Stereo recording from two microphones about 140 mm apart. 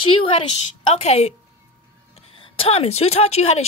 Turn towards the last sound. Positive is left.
turn(degrees=50)  # may be behind; listen again after turning